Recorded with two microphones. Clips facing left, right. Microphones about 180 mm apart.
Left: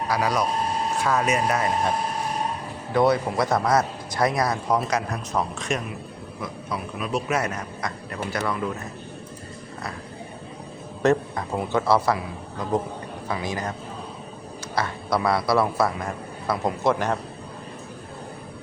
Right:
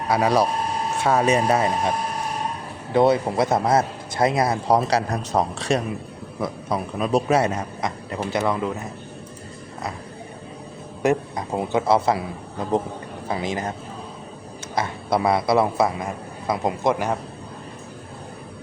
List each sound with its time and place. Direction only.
0.1 s a man's voice: 25° right (ahead or behind)
2.9 s a man's voice: 25° right (ahead or behind)
11.0 s a man's voice: 15° right (ahead or behind)
14.8 s a man's voice: 25° right (ahead or behind)